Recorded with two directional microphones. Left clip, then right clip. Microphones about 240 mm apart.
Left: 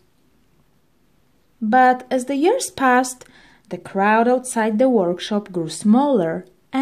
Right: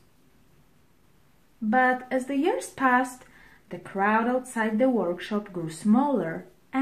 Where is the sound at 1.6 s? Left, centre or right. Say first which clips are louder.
Left 8 dB; left.